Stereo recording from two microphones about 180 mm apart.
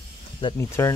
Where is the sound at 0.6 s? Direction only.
15° left (ahead or behind).